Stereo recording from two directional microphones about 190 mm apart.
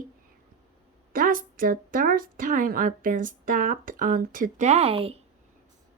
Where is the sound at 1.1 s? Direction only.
50° right (ahead or behind); by 5.1 s 30° right (ahead or behind).